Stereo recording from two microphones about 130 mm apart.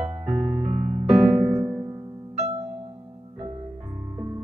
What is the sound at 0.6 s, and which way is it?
Music, 55° right (ahead or behind).